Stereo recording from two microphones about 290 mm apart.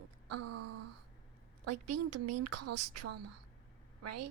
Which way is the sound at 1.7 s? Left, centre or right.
Right.